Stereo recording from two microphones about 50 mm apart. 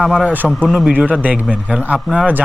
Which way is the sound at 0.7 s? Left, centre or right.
Centre.